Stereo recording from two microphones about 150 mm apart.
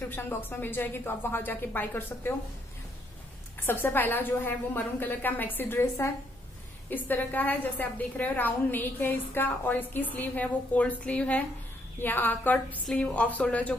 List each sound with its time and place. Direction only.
0.1 s a woman's voice: 15° left (ahead or behind)
3.6 s a woman's voice: 15° left (ahead or behind)